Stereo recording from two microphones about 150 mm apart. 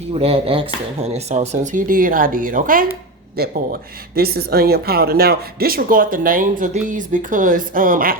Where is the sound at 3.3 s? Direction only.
80° right.